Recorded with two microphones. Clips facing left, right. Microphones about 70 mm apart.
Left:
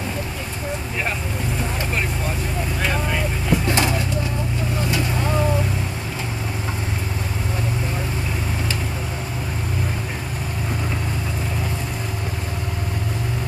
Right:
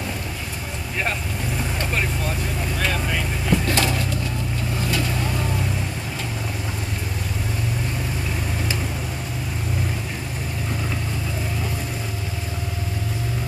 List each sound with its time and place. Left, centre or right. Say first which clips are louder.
2.8 s vehicle: left 2 dB; centre
3.6 s pigeon: left 1 dB; left